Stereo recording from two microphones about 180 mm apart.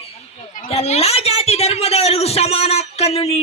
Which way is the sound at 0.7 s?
35° left (ahead or behind).